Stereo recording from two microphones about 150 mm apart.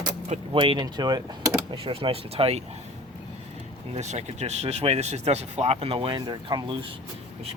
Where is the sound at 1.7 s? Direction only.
40° right (ahead or behind).